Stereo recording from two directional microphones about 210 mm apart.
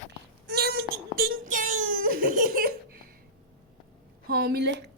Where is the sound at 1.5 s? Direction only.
40° right (ahead or behind).